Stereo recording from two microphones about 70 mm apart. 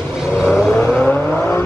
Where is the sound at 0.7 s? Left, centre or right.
Left.